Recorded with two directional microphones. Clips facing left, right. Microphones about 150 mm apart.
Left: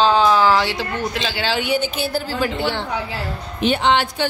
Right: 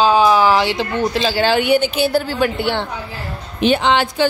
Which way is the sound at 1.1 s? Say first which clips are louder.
Right 7 dB; 35° right (ahead or behind).